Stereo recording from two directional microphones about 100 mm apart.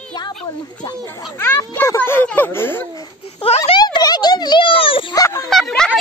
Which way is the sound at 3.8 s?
45° left (ahead or behind).